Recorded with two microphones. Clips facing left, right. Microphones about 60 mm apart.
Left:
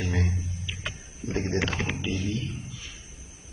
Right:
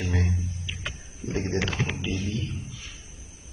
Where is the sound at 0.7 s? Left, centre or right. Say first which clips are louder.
Even; centre.